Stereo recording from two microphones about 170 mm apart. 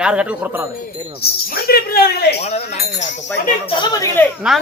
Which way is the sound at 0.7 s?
60° left (ahead or behind).